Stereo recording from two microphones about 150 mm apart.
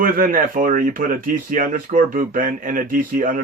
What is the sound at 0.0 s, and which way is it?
Speech, 65° right (ahead or behind).